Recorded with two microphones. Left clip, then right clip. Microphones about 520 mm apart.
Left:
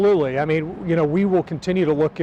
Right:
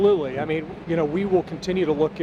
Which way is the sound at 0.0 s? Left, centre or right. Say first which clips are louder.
Left 3 dB; left.